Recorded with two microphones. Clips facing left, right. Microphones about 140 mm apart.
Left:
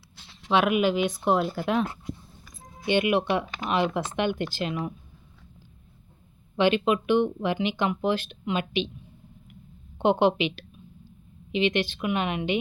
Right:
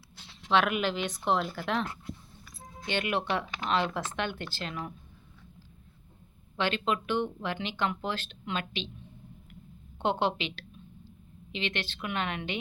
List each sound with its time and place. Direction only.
0.4 s speech: 15° left (ahead or behind)
6.6 s speech: 15° left (ahead or behind)
10.0 s a sound: 15° left (ahead or behind)
11.5 s speech: 15° left (ahead or behind)